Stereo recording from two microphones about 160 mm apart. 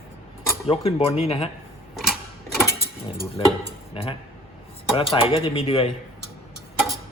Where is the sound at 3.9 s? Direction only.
35° left (ahead or behind).